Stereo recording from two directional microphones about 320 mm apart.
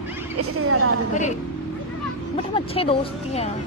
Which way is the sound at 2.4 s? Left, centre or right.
Centre.